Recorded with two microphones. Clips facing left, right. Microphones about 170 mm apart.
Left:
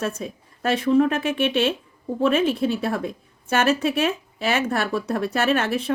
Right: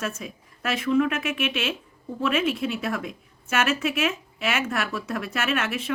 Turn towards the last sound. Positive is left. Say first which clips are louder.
# left 5 dB
turn(degrees=35)  # may be behind; listen again after turning